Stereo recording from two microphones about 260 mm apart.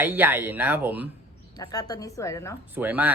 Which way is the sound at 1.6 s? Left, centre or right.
Centre.